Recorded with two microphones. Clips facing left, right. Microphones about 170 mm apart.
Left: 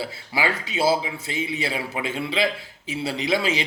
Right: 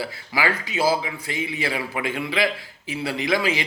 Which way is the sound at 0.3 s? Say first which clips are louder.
Right 1 dB; 25° left (ahead or behind).